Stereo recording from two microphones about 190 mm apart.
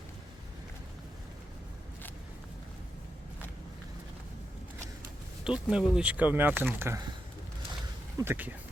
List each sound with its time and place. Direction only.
5.5 s speech: 5° right (ahead or behind)
8.2 s speech: 10° right (ahead or behind)